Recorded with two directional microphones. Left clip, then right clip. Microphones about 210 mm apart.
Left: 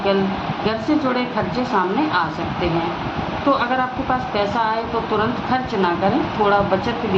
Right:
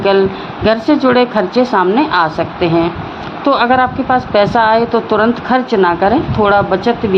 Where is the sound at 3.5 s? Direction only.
50° right (ahead or behind).